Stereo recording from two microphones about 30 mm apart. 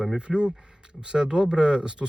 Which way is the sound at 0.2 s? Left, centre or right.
Right.